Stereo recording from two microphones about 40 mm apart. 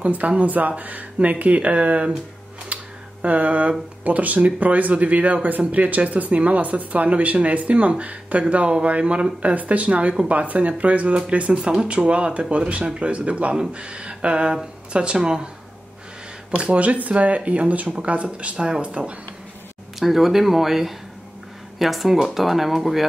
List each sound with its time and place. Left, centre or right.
0.0 s speech: right
2.7 s a sound: right
4.0 s speech: right; by 15.5 s centre
16.5 s speech: right
18.6 s speech: right
20.0 s speech: centre